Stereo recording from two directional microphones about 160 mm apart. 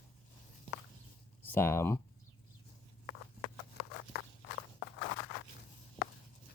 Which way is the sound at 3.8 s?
90° left.